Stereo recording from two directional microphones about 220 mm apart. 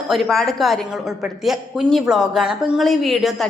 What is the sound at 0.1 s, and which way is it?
A woman's voice, centre (ahead or behind).